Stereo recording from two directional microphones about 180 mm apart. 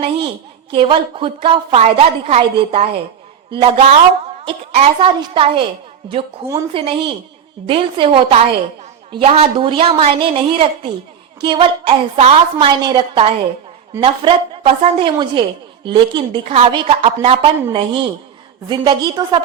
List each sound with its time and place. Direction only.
0.7 s a woman's voice: 30° right (ahead or behind)